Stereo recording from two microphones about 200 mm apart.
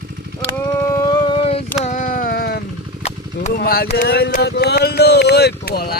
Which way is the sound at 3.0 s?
35° left (ahead or behind).